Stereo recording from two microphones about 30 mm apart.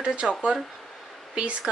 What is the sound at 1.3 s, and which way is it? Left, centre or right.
Speech, right.